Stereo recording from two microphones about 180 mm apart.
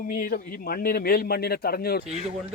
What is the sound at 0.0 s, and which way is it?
A man's voice, 50° left (ahead or behind).